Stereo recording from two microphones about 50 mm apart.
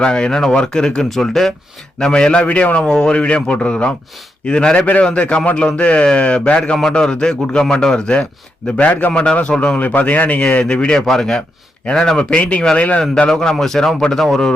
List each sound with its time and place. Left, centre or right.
0.0 s a man's voice: centre
1.1 s a man's voice: centre
2.4 s a man's voice: left
9.7 s a man's voice: left
13.0 s a man's voice: centre